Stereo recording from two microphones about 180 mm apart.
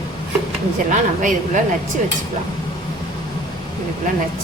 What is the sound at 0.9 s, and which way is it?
Speech, 45° right (ahead or behind).